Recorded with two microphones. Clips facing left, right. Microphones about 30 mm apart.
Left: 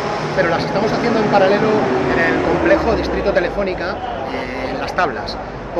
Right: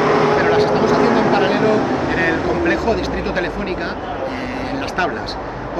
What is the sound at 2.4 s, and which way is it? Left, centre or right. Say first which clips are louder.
Speech: left 2 dB; left.